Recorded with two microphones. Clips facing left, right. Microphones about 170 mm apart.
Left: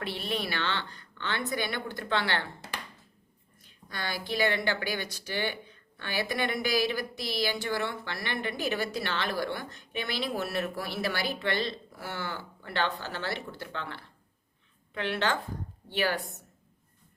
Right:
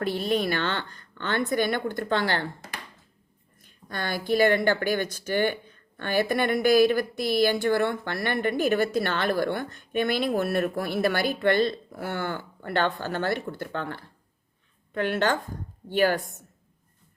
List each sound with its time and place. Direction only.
0.0 s a woman's voice: 45° right (ahead or behind)
3.6 s a woman's voice: 50° right (ahead or behind)